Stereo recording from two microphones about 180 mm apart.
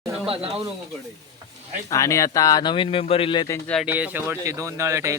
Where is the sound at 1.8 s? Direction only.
15° left (ahead or behind).